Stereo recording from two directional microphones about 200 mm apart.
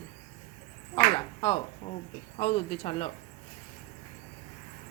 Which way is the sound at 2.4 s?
30° left (ahead or behind).